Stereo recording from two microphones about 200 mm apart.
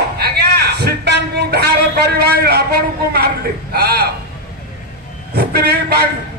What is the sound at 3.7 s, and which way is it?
Speech, 50° right (ahead or behind).